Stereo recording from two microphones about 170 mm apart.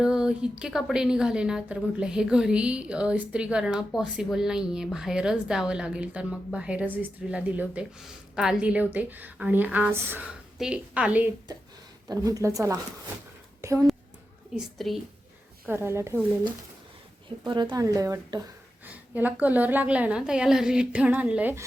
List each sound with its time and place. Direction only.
0.0 s a woman's voice: 5° right (ahead or behind)
12.0 s a woman's voice: 20° right (ahead or behind)
14.5 s a woman's voice: centre (ahead or behind)
15.6 s a woman's voice: 15° right (ahead or behind)
17.2 s a woman's voice: 25° right (ahead or behind)
18.9 s a woman's voice: 10° right (ahead or behind)